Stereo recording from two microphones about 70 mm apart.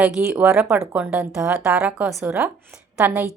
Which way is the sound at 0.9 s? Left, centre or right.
Right.